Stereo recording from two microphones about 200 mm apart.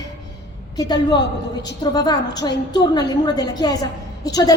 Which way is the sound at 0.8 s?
20° left (ahead or behind).